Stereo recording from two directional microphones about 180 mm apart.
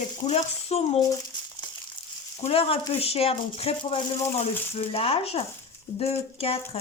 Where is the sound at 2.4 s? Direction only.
35° left (ahead or behind).